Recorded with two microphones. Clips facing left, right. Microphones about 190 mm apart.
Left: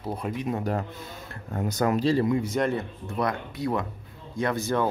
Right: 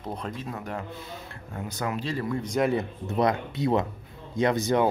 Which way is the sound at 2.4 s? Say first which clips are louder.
Right 1 dB; 5° right (ahead or behind).